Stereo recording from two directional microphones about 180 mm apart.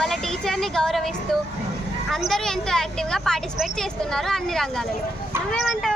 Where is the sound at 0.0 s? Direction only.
Centre (ahead or behind).